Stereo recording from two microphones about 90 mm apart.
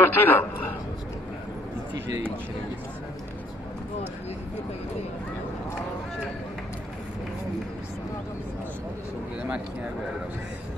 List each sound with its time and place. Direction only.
0.0 s a man's voice: 25° left (ahead or behind)